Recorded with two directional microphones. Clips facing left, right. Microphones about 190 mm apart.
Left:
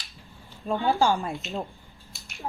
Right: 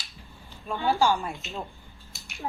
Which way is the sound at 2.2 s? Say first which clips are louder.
Right 2 dB; centre (ahead or behind).